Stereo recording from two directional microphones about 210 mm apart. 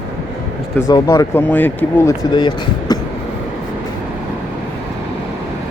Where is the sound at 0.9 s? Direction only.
15° left (ahead or behind).